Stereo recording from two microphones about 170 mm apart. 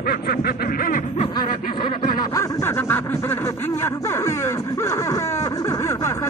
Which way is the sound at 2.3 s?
15° left (ahead or behind).